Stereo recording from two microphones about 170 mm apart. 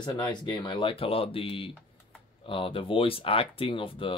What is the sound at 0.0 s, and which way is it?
Speech, 25° left (ahead or behind).